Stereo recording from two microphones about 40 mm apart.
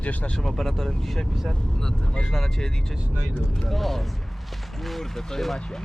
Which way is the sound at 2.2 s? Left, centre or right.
Centre.